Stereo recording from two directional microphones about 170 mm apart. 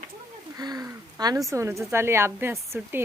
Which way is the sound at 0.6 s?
20° right (ahead or behind).